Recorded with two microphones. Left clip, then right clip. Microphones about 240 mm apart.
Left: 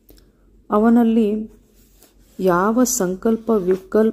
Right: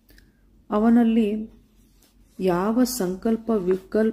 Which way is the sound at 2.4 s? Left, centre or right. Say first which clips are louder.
Left 6 dB; centre.